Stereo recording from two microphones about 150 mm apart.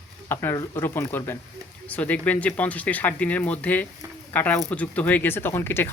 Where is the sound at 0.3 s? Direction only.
15° left (ahead or behind).